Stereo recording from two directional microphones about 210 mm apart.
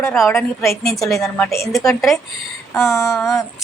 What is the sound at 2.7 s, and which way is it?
Speech, 15° left (ahead or behind).